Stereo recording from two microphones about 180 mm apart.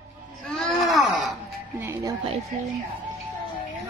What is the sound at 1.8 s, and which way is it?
Speech, 15° right (ahead or behind).